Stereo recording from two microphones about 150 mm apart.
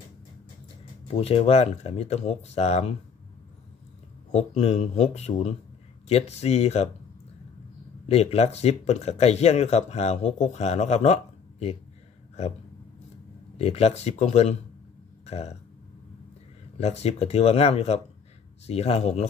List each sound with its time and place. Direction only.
1.0 s speech: 40° left (ahead or behind)
4.3 s speech: 45° left (ahead or behind)
8.1 s speech: 45° left (ahead or behind)
13.6 s speech: 45° left (ahead or behind)
16.8 s speech: 45° left (ahead or behind)